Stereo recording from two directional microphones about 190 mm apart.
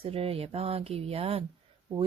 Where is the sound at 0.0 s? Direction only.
30° right (ahead or behind).